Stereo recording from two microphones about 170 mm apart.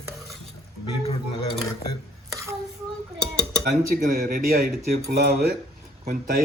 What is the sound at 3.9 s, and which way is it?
Speech, 60° right (ahead or behind).